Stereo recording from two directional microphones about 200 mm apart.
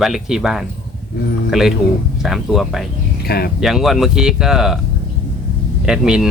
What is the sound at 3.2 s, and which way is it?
Speech, 50° left (ahead or behind).